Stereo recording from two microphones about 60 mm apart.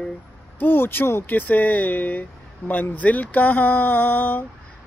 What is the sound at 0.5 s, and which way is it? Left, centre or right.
Speech, left.